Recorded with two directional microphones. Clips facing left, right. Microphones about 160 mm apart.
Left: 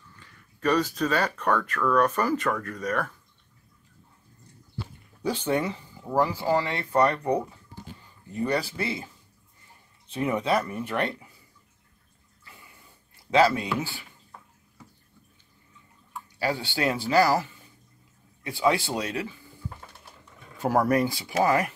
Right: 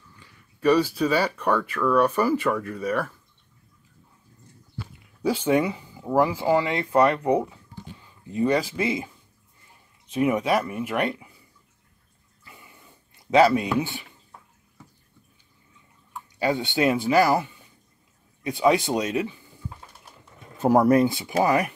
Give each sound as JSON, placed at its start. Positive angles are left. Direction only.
{"t": 0.2, "sound": "speech", "side_deg": -10}
{"t": 5.2, "sound": "speech", "side_deg": -10}
{"t": 10.1, "sound": "speech", "side_deg": -10}
{"t": 13.3, "sound": "speech", "side_deg": -15}
{"t": 16.3, "sound": "speech", "side_deg": -20}
{"t": 20.6, "sound": "speech", "side_deg": -20}